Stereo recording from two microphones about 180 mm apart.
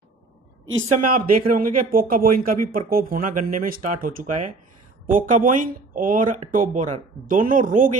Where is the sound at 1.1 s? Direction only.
50° right (ahead or behind).